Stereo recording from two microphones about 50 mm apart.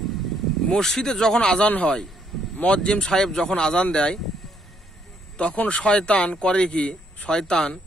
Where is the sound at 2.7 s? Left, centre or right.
Left.